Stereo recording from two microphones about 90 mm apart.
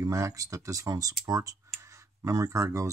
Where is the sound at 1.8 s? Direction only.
35° right (ahead or behind).